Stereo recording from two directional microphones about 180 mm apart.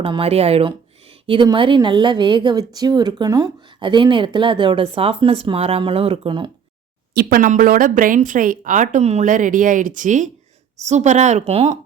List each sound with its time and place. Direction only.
0.0 s a woman's voice: 30° right (ahead or behind)
7.1 s a woman's voice: 55° right (ahead or behind); by 11.8 s 35° right (ahead or behind)